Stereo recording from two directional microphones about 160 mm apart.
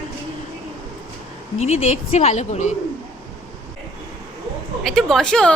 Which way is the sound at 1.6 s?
45° left (ahead or behind).